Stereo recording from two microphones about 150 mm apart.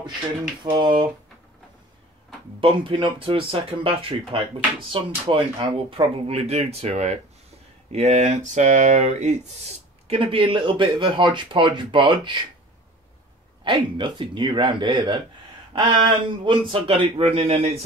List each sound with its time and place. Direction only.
0.7 s speech: 30° right (ahead or behind)
2.6 s speech: 35° right (ahead or behind); by 9.4 s 50° right (ahead or behind)
10.0 s speech: 35° right (ahead or behind)
13.7 s speech: 30° right (ahead or behind)